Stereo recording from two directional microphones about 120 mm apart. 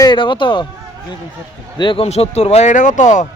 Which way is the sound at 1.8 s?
45° left (ahead or behind).